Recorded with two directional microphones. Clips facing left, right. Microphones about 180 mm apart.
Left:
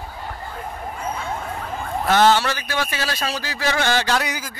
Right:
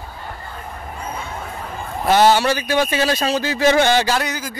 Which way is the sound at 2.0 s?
10° right (ahead or behind).